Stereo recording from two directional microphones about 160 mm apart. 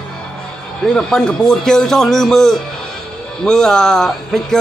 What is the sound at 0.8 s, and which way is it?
A man's voice, 5° left (ahead or behind).